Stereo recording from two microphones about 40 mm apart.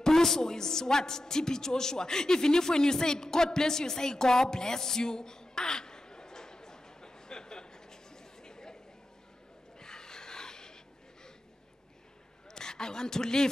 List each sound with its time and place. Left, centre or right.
0.0 s a woman's voice: centre
9.8 s snort: centre
12.4 s a sound: centre